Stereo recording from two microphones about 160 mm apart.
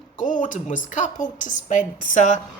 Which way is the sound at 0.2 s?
55° left (ahead or behind).